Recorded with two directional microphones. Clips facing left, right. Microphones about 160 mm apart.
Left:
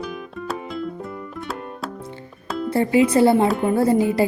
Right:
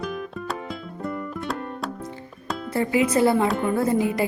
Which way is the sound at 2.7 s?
30° left (ahead or behind).